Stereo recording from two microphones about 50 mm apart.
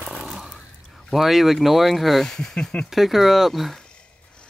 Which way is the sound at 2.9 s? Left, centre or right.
Centre.